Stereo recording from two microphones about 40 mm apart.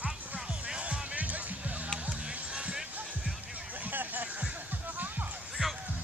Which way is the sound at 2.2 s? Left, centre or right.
Right.